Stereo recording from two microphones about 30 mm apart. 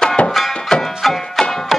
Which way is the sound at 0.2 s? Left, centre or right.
Left.